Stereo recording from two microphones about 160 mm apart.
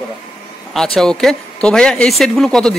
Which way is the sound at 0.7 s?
5° left (ahead or behind).